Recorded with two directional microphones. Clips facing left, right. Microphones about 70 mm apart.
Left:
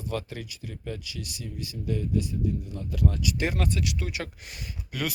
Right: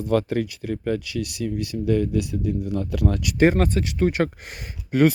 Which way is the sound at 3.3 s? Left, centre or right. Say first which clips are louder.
Right 10 dB; right.